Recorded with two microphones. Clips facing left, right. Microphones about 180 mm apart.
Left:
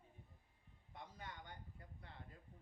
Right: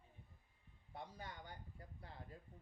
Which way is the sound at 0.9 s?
35° right (ahead or behind).